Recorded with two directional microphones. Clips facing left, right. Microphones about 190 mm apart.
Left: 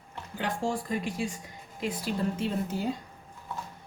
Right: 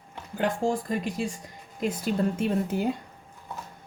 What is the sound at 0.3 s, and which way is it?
A woman's voice, 50° right (ahead or behind).